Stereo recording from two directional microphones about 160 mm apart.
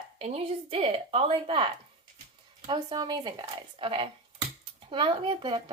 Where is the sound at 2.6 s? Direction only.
25° right (ahead or behind).